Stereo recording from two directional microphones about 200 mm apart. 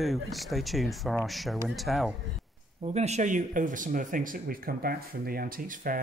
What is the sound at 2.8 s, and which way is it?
Speech, 35° right (ahead or behind).